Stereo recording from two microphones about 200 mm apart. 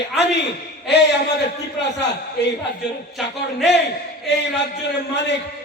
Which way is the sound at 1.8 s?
60° left (ahead or behind).